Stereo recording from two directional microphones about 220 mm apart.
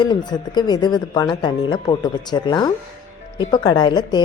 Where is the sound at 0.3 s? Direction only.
20° left (ahead or behind).